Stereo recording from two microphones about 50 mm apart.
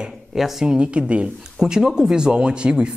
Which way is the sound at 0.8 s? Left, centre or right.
Right.